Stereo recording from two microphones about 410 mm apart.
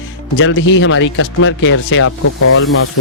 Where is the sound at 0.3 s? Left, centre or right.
Left.